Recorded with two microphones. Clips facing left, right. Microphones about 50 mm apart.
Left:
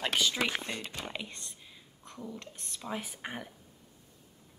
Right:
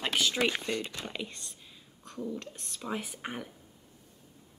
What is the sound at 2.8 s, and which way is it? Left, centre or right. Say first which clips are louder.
Speech: right 2 dB; centre.